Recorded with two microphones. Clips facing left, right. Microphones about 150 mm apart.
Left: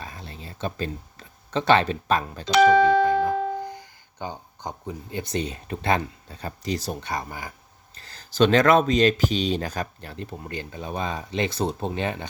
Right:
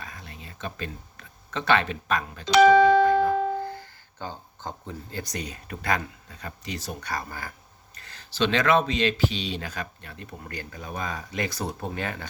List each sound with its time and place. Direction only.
0.0 s a sound: 30° left (ahead or behind)
2.8 s speech: 20° left (ahead or behind); by 6.9 s 35° left (ahead or behind)
7.0 s speech: 20° left (ahead or behind)
7.9 s speech: 35° left (ahead or behind)